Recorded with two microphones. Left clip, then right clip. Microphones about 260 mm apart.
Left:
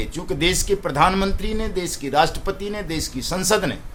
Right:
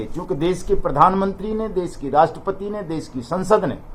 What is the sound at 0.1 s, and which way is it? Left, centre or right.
Speech, left.